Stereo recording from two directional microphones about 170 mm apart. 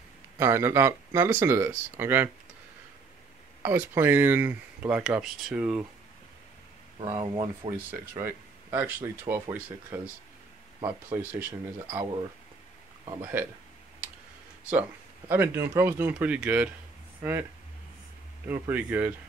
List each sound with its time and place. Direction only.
0.4 s speech: 15° right (ahead or behind)
3.6 s speech: 15° right (ahead or behind)
7.2 s speech: 35° right (ahead or behind)
7.7 s speech: 15° right (ahead or behind)
13.2 s speech: 10° right (ahead or behind)
14.7 s speech: 10° right (ahead or behind)
18.5 s speech: 10° right (ahead or behind)